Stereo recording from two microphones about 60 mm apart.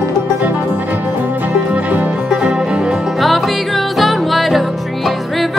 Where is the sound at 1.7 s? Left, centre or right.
Right.